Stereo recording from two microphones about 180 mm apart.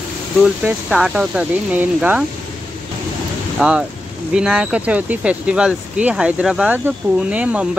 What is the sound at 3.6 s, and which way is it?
Speech, 10° right (ahead or behind).